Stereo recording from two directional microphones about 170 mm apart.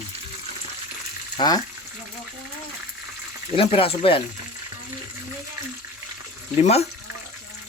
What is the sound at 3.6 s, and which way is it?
Speech, 35° left (ahead or behind).